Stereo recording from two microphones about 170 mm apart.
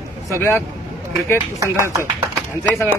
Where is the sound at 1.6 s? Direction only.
20° right (ahead or behind).